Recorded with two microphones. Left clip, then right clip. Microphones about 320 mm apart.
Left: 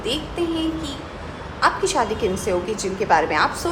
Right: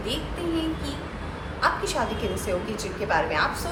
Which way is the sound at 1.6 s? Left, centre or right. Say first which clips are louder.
Left 5 dB; centre.